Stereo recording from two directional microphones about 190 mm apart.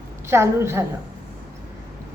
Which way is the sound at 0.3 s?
15° right (ahead or behind).